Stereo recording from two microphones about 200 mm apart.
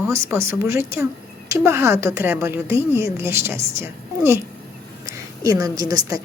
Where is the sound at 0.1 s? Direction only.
15° right (ahead or behind).